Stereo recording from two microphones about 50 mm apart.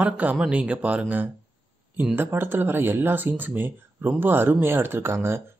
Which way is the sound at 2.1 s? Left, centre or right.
Right.